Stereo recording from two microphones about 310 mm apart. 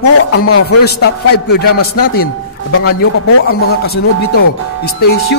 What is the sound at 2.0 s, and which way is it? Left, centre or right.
Speech, left.